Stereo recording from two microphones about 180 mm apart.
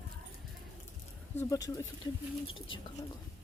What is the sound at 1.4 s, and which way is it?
Speech, 20° left (ahead or behind).